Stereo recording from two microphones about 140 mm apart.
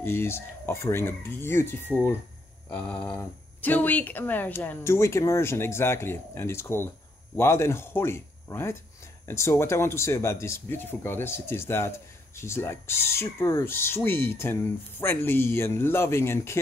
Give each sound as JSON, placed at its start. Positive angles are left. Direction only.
{"t": 0.0, "sound": "speech", "side_deg": 15}